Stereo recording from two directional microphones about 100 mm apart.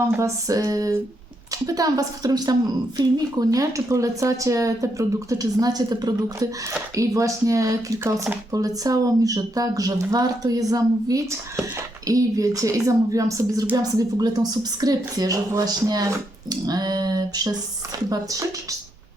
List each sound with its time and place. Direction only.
0.2 s speech: 35° right (ahead or behind)